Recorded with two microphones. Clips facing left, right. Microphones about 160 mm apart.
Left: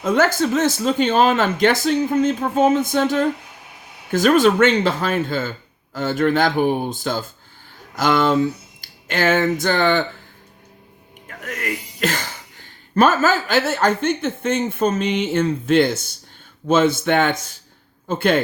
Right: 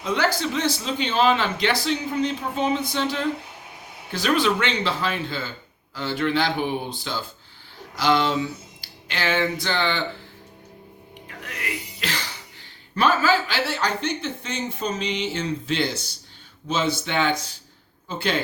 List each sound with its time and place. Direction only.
0.0 s speech: 50° left (ahead or behind)
11.3 s music: 50° left (ahead or behind)
12.9 s speech: 45° left (ahead or behind)